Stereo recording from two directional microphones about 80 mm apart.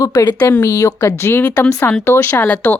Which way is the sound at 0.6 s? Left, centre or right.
Left.